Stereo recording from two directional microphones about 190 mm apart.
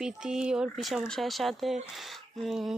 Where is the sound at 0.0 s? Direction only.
5° right (ahead or behind).